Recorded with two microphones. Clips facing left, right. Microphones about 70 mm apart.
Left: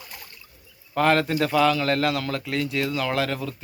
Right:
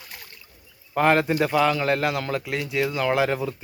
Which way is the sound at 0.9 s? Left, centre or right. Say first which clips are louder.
Right 1 dB; centre.